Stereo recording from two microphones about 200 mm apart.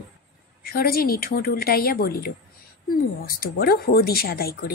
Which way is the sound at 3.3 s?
50° left (ahead or behind).